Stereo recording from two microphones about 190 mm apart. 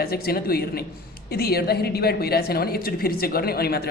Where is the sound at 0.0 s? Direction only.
55° left (ahead or behind).